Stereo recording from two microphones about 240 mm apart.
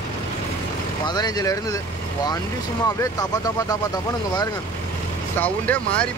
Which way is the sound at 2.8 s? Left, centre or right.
Centre.